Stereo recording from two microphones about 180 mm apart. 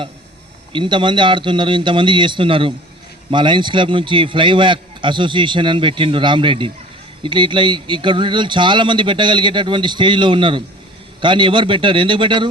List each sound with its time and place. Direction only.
0.7 s a man's voice: 25° right (ahead or behind)